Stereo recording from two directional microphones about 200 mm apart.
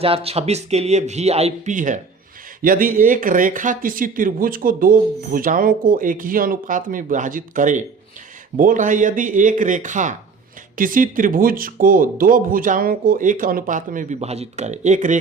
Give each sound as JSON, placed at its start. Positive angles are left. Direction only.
{"t": 0.0, "sound": "speech", "side_deg": -30}